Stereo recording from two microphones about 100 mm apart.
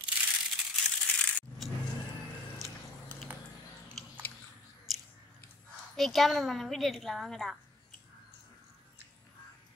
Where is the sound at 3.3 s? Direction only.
20° right (ahead or behind).